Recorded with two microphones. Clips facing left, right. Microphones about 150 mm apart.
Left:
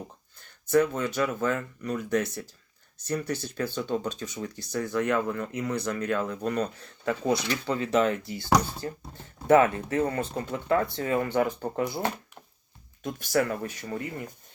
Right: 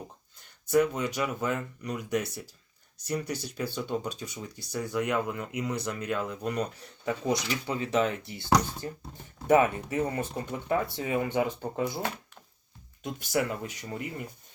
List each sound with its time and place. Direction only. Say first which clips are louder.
0.7 s speech: left 1 dB; 15° right (ahead or behind)
7.9 s speech: left 3 dB; centre (ahead or behind)
8.3 s speech: left 1 dB; 25° right (ahead or behind)
13.0 s speech: left 3 dB; 20° right (ahead or behind)